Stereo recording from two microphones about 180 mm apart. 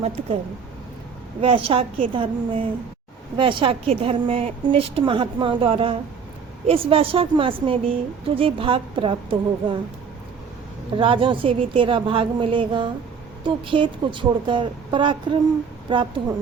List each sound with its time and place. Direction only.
0.0 s a woman's voice: 35° right (ahead or behind)
1.4 s a woman's voice: 30° right (ahead or behind)
10.9 s a woman's voice: 30° right (ahead or behind)